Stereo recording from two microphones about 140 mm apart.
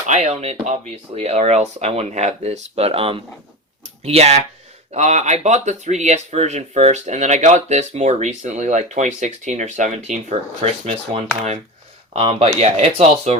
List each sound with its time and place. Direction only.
0.1 s speech: 55° right (ahead or behind)